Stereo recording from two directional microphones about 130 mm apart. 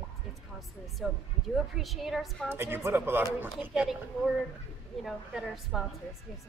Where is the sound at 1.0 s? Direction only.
Centre (ahead or behind).